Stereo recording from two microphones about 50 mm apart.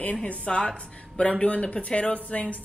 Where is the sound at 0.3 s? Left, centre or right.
Left.